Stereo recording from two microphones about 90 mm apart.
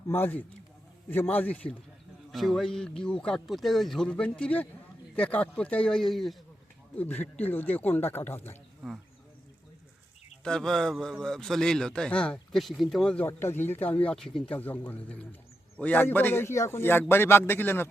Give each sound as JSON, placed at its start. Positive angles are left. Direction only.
{"t": 0.1, "sound": "speech", "side_deg": 20}
{"t": 2.3, "sound": "speech", "side_deg": 0}
{"t": 6.9, "sound": "speech", "side_deg": 15}
{"t": 8.8, "sound": "speech", "side_deg": 0}
{"t": 10.4, "sound": "speech", "side_deg": 5}
{"t": 12.5, "sound": "speech", "side_deg": 0}
{"t": 13.2, "sound": "speech", "side_deg": 25}